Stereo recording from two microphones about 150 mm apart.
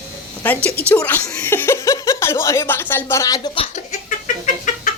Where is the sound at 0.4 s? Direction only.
10° left (ahead or behind); by 3.7 s 30° left (ahead or behind).